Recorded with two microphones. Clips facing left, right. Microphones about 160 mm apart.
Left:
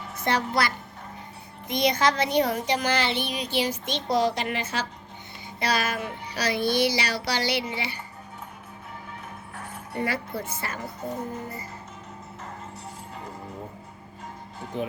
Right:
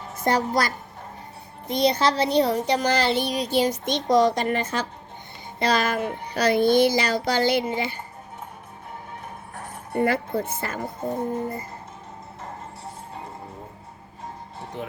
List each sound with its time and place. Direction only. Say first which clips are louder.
0.2 s child singing: right 3 dB; 45° right (ahead or behind)
1.6 s a woman's voice: right 2 dB; 30° right (ahead or behind)
3.6 s child singing: right 4 dB; 45° right (ahead or behind)
9.6 s speech: right 7 dB; 50° right (ahead or behind)
11.3 s child singing: right 7 dB; 50° right (ahead or behind)